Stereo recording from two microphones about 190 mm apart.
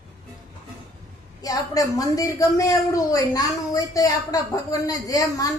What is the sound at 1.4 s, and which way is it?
A woman's voice, 20° left (ahead or behind).